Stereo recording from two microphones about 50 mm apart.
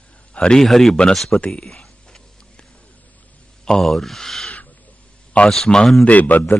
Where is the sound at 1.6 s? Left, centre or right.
Centre.